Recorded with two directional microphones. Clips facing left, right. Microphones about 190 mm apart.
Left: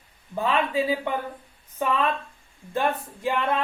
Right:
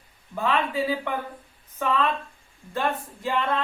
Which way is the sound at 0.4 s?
15° left (ahead or behind).